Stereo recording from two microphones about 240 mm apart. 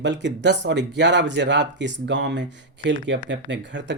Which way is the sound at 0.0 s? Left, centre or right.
Right.